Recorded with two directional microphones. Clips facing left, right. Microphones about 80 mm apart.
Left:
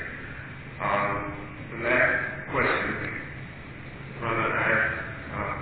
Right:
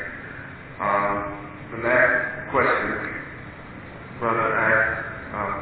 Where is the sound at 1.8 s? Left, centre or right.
Right.